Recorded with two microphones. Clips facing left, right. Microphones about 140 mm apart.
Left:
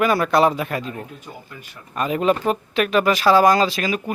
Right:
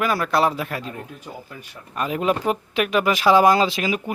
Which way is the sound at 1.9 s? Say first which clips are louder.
Left 3 dB; centre (ahead or behind).